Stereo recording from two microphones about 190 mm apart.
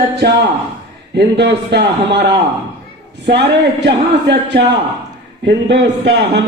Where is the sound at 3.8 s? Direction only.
70° right (ahead or behind).